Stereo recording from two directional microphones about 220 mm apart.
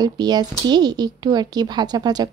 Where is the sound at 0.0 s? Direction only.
20° right (ahead or behind).